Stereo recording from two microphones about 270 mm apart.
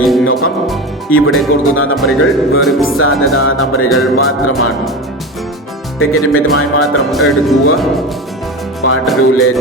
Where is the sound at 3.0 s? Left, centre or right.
Left.